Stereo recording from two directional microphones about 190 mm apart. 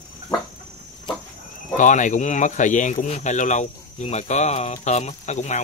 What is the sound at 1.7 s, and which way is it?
Speech, 40° left (ahead or behind).